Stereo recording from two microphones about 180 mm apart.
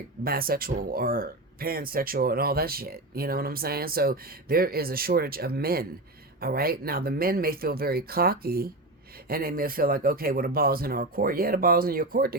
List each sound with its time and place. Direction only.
0.3 s speech: 55° right (ahead or behind)